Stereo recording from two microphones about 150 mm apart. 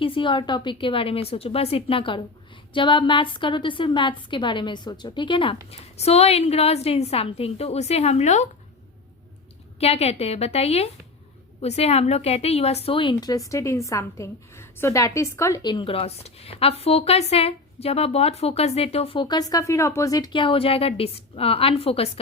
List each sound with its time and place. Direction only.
0.0 s a woman's voice: 35° left (ahead or behind)
5.7 s a woman's voice: 45° left (ahead or behind)
9.8 s a woman's voice: 45° left (ahead or behind); by 15.6 s 20° left (ahead or behind)
15.6 s a woman's voice: 35° left (ahead or behind)